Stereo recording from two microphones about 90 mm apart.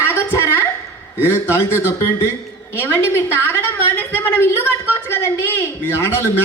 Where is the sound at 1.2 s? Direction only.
25° left (ahead or behind).